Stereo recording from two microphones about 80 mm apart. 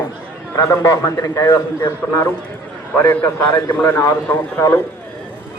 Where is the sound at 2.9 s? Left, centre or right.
Left.